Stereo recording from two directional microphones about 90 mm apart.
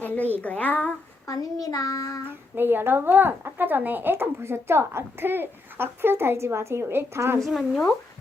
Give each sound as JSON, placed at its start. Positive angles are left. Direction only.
{"t": 0.4, "sound": "speech", "side_deg": 15}
{"t": 1.3, "sound": "child singing", "side_deg": 45}
{"t": 2.6, "sound": "speech", "side_deg": -25}
{"t": 7.4, "sound": "speech", "side_deg": 0}